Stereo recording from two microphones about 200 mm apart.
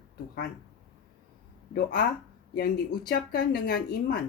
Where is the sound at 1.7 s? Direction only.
45° left (ahead or behind).